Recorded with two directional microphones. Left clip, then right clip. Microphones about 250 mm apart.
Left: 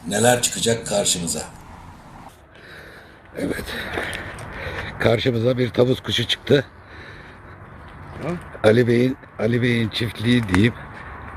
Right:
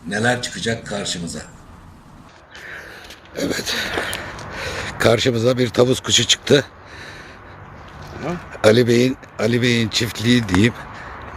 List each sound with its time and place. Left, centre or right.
0.1 s speech: centre
3.3 s speech: centre
8.6 s speech: centre